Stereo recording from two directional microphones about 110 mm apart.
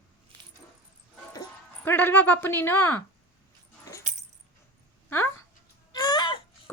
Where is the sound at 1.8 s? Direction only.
20° left (ahead or behind).